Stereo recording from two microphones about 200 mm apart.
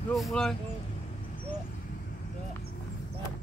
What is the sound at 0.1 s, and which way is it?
Speech, centre (ahead or behind).